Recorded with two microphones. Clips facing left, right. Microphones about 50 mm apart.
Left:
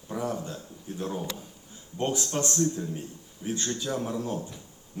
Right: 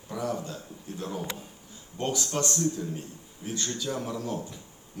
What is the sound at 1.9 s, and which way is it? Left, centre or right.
A man's voice, left.